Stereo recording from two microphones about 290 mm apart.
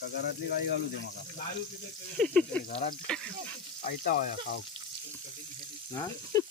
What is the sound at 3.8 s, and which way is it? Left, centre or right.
Speech, left.